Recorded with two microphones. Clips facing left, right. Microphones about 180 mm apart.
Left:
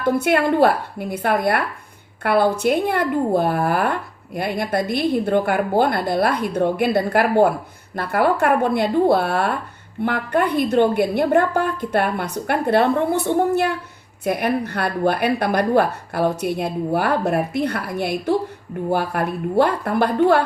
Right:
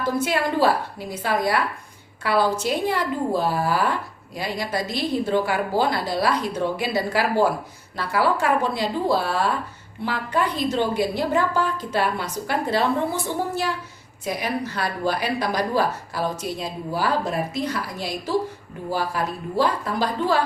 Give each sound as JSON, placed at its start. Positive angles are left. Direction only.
{"t": 0.0, "sound": "speech", "side_deg": 60}